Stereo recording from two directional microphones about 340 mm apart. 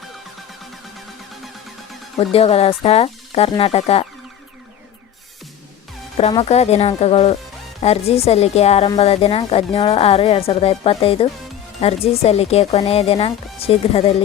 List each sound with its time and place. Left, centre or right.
2.1 s speech: centre
6.1 s speech: centre